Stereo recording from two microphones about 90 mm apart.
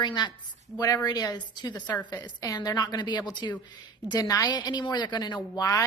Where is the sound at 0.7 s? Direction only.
45° left (ahead or behind).